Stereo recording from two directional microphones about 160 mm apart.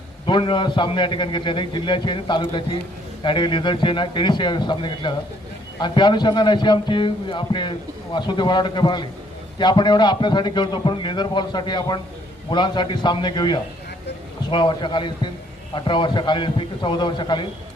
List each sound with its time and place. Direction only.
0.3 s a man's voice: 30° left (ahead or behind)